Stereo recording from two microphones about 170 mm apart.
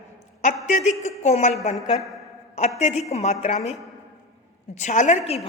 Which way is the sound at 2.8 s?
40° left (ahead or behind).